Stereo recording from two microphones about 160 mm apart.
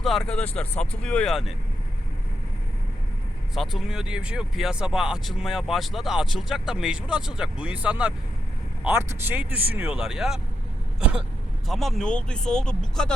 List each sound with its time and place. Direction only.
0.0 s speech: centre (ahead or behind)
3.5 s speech: centre (ahead or behind)
11.7 s speech: centre (ahead or behind)